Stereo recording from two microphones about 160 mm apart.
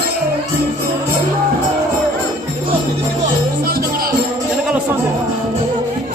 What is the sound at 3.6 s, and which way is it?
Music, 65° right (ahead or behind).